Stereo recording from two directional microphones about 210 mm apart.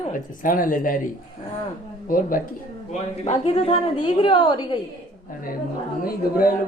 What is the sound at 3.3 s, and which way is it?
A woman's voice, 25° left (ahead or behind).